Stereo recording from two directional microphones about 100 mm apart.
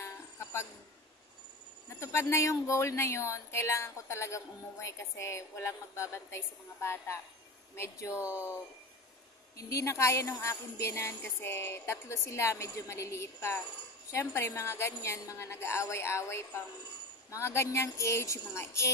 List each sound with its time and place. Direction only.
0.0 s a sound: 30° left (ahead or behind)
1.9 s speech: 30° left (ahead or behind)
9.6 s a woman's voice: 30° left (ahead or behind)